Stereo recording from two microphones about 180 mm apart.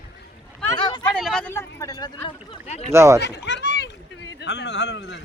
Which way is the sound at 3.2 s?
70° left (ahead or behind).